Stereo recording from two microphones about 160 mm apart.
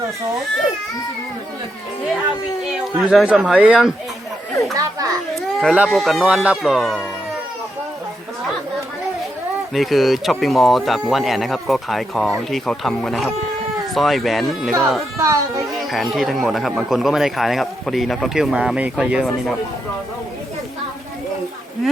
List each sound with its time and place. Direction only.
3.0 s speech: 5° right (ahead or behind)
4.7 s speech: 20° right (ahead or behind)
5.3 s speech: centre (ahead or behind)
9.7 s speech: centre (ahead or behind)
15.2 s speech: 20° right (ahead or behind)
15.7 s speech: centre (ahead or behind)